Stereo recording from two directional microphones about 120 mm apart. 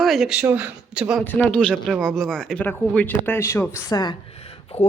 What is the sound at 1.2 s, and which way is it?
Speech, 15° left (ahead or behind).